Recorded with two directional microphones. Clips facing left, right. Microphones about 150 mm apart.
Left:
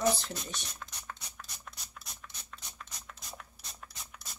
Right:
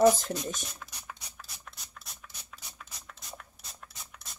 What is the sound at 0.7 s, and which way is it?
Music, centre (ahead or behind).